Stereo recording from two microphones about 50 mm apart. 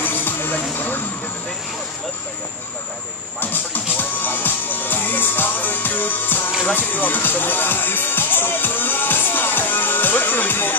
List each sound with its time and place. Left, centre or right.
0.0 s music: left
3.3 s music: left